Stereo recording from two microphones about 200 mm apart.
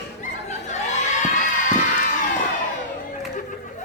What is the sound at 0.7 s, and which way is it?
Crowd, 35° left (ahead or behind).